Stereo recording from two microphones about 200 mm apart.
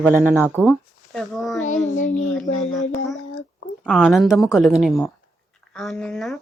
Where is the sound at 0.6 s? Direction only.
5° left (ahead or behind).